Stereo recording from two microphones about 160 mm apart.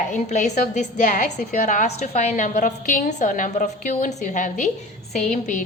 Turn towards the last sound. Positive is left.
turn(degrees=45)  # may be behind; listen again after turning